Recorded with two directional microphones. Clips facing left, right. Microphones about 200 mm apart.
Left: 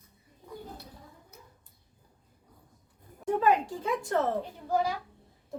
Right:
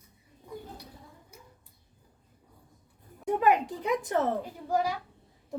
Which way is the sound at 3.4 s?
20° right (ahead or behind).